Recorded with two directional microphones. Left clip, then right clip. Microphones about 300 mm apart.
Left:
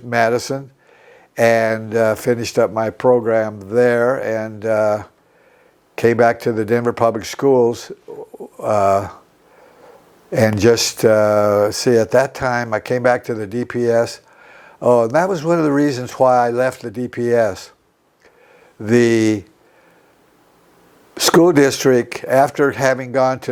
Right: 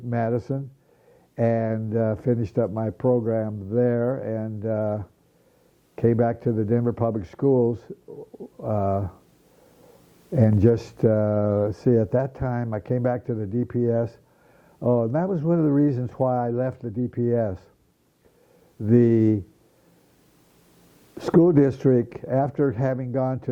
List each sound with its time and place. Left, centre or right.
0.1 s speech: centre
8.1 s bird: left
8.6 s speech: centre
10.3 s speech: centre
18.8 s speech: centre
21.2 s speech: centre